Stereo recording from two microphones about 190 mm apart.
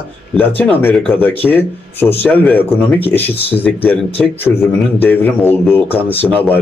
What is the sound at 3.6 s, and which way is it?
A man's voice, 10° left (ahead or behind).